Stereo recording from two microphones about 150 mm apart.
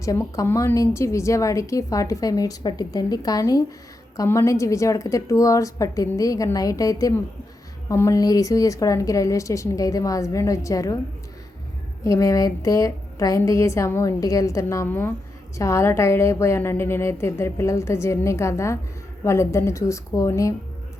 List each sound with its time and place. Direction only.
0.0 s a woman's voice: 20° left (ahead or behind)
12.0 s a woman's voice: 20° left (ahead or behind)